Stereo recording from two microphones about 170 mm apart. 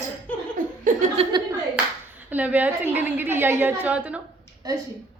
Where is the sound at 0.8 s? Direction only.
45° right (ahead or behind).